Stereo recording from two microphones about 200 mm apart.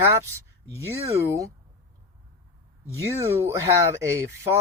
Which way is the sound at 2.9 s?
15° right (ahead or behind).